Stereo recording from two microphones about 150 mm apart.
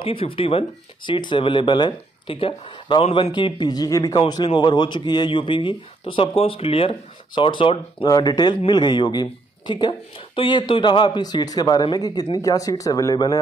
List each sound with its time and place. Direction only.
0.0 s a man's voice: 35° left (ahead or behind)